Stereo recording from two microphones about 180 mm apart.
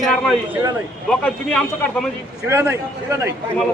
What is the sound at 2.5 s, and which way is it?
Speech, 15° right (ahead or behind).